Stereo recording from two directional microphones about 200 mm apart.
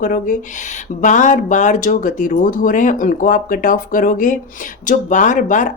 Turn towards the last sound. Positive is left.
turn(degrees=40)  # may be behind; listen again after turning